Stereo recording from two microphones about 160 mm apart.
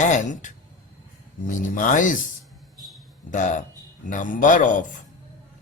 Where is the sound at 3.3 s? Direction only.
50° left (ahead or behind).